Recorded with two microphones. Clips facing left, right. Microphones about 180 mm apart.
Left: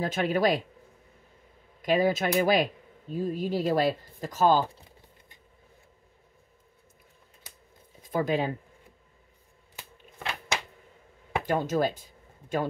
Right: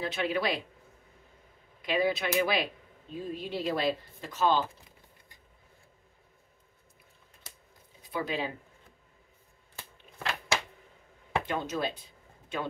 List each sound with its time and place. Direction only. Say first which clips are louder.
0.0 s speech: left 5 dB; 45° left (ahead or behind)
1.8 s speech: left 4 dB; 45° left (ahead or behind)
8.1 s speech: left 6 dB; 45° left (ahead or behind)
9.8 s a sound: even; 20° left (ahead or behind)
11.4 s speech: left 9 dB; 45° left (ahead or behind)